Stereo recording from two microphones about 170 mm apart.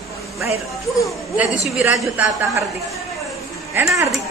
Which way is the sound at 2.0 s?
10° right (ahead or behind).